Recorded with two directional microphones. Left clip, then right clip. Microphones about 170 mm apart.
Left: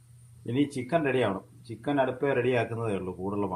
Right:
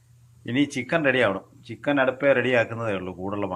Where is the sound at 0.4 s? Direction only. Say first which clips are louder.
Right 4 dB; 5° right (ahead or behind).